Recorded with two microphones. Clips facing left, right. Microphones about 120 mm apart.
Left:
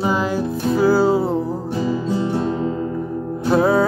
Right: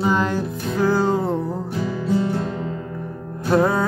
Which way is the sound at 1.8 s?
20° left (ahead or behind).